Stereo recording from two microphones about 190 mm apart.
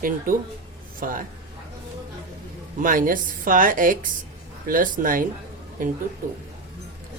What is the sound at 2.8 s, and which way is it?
Speech, 45° right (ahead or behind).